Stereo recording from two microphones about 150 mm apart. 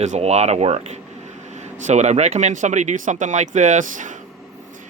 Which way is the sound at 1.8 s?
50° right (ahead or behind).